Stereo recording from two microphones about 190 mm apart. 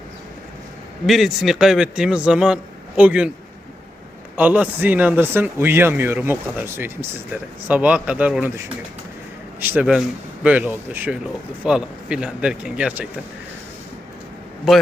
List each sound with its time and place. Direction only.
1.0 s a man's voice: centre (ahead or behind)
4.4 s a man's voice: 10° right (ahead or behind)
9.6 s a man's voice: 10° right (ahead or behind)
14.7 s a man's voice: centre (ahead or behind)